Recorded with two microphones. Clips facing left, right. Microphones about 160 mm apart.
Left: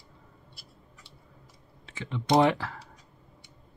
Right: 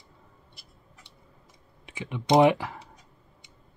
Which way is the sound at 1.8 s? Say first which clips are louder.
Even; 15° right (ahead or behind).